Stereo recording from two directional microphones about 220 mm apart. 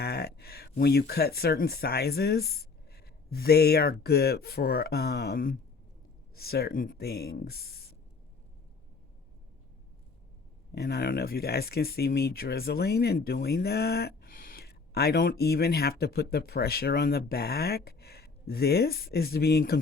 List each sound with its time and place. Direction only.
0.0 s a sound: 45° left (ahead or behind)
0.8 s speech: 45° left (ahead or behind)
10.7 s speech: 45° left (ahead or behind)